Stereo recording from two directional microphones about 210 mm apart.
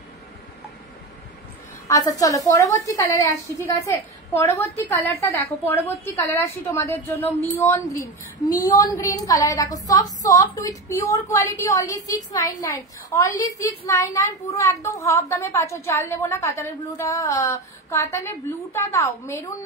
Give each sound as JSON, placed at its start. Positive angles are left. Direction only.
{"t": 1.9, "sound": "speech", "side_deg": 15}
{"t": 9.1, "sound": "speech", "side_deg": 15}